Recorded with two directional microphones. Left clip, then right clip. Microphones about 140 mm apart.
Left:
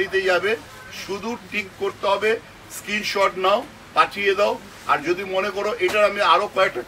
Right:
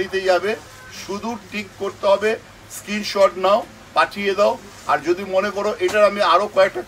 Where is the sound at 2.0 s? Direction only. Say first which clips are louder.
Right 4 dB; 25° right (ahead or behind).